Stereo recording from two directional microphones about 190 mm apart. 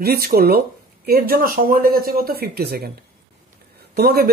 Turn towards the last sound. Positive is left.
turn(degrees=-55)  # may be behind; listen again after turning